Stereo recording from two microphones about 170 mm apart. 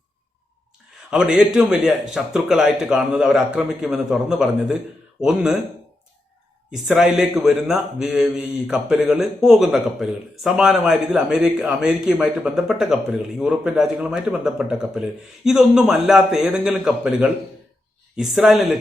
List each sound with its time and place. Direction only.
1.1 s speech: 5° right (ahead or behind)
6.7 s speech: centre (ahead or behind)